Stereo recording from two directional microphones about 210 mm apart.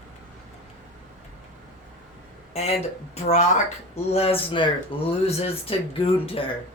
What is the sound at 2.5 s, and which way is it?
Speech, 30° left (ahead or behind).